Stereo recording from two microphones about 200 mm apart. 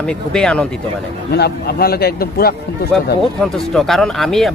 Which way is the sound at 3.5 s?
Centre (ahead or behind).